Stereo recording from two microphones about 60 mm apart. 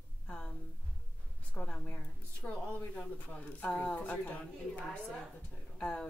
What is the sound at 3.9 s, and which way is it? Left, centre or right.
Speech, left.